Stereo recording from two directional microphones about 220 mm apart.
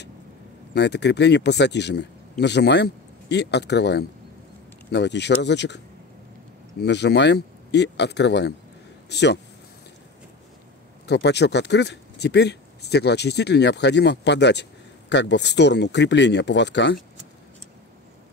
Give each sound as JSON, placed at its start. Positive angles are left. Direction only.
{"t": 0.7, "sound": "speech", "side_deg": 50}
{"t": 6.8, "sound": "speech", "side_deg": 50}
{"t": 11.1, "sound": "speech", "side_deg": 50}